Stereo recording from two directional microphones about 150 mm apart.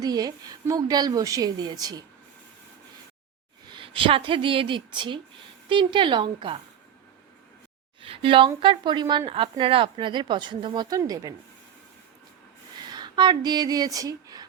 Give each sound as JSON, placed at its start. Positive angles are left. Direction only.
{"t": 0.0, "sound": "a woman's voice", "side_deg": -25}
{"t": 3.7, "sound": "speech", "side_deg": -35}
{"t": 8.0, "sound": "speech", "side_deg": -35}
{"t": 12.8, "sound": "speech", "side_deg": -30}